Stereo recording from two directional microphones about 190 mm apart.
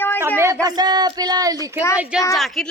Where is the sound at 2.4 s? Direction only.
Centre (ahead or behind).